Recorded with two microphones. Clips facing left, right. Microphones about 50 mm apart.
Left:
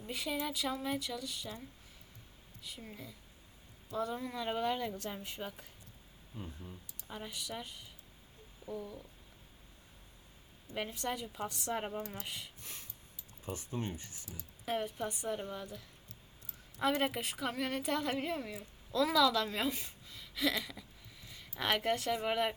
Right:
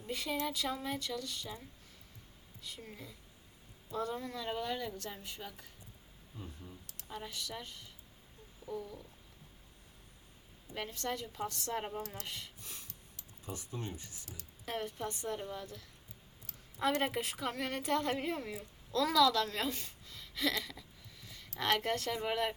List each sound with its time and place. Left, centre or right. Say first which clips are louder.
0.1 s a woman's voice: right 1 dB; centre
2.6 s a woman's voice: even; centre; by 6.5 s left
7.1 s a woman's voice: even; centre
10.8 s a woman's voice: left 1 dB; centre
12.6 s a sound: left 1 dB; left
13.4 s speech: left 3 dB; left
14.6 s a woman's voice: left 3 dB; centre